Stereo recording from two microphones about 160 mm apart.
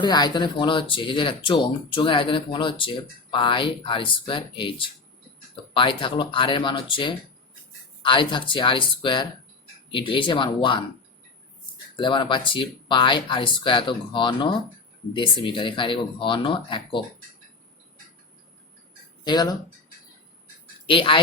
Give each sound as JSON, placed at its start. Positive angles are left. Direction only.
{"t": 0.0, "sound": "speech", "side_deg": 25}
{"t": 5.7, "sound": "speech", "side_deg": 30}
{"t": 11.9, "sound": "speech", "side_deg": 30}
{"t": 19.2, "sound": "speech", "side_deg": 25}
{"t": 20.8, "sound": "speech", "side_deg": 30}